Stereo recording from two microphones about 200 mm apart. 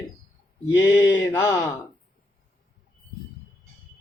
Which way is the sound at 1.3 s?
15° left (ahead or behind).